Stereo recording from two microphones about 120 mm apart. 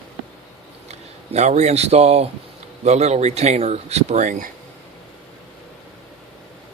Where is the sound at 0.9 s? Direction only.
70° right (ahead or behind); by 4.4 s 90° right.